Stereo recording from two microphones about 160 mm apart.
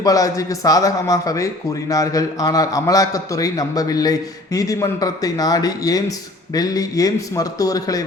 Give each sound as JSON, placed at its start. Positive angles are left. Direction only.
{"t": 0.0, "sound": "a man's voice", "side_deg": 20}